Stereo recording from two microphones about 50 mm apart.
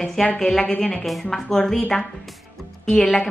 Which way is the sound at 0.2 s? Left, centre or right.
Centre.